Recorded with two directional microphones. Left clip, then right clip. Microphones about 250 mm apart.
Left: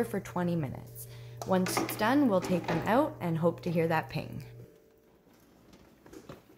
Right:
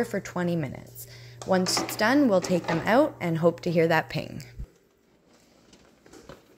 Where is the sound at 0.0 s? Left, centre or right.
Centre.